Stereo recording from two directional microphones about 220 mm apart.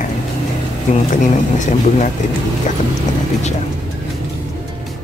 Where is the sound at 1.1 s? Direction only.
35° left (ahead or behind).